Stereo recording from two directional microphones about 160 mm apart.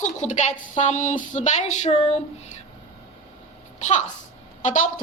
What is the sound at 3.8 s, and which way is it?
A woman's voice, 50° left (ahead or behind).